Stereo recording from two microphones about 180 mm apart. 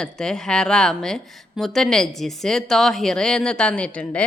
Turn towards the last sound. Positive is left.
turn(degrees=5)  # may be behind; listen again after turning